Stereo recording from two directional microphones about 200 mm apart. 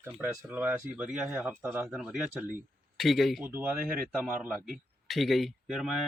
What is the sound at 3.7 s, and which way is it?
Speech, 45° right (ahead or behind).